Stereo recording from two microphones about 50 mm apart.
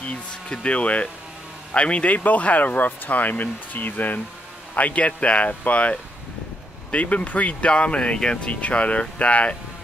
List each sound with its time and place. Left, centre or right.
0.0 s speech: left